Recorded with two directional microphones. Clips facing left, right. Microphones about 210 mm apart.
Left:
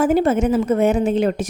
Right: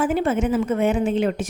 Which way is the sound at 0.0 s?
40° left (ahead or behind).